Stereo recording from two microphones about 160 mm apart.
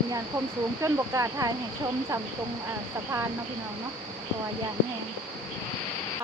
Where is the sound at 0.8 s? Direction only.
20° right (ahead or behind).